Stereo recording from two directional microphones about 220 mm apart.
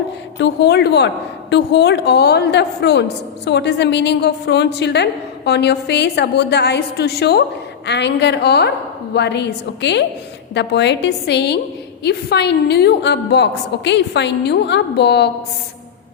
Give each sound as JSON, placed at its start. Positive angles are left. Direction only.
{"t": 0.3, "sound": "a woman's voice", "side_deg": 50}